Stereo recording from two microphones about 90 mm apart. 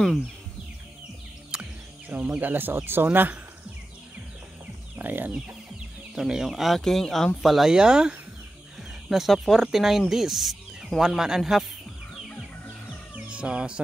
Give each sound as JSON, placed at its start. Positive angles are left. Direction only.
{"t": 1.5, "sound": "music", "side_deg": -10}
{"t": 2.0, "sound": "speech", "side_deg": -15}
{"t": 4.9, "sound": "speech", "side_deg": -20}
{"t": 6.1, "sound": "speech", "side_deg": -5}
{"t": 13.1, "sound": "music", "side_deg": -10}